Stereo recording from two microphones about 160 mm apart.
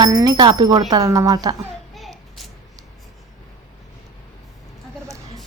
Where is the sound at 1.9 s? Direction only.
Centre (ahead or behind).